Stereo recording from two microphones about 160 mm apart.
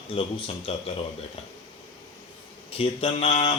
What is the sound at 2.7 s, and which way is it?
Speech, 35° left (ahead or behind).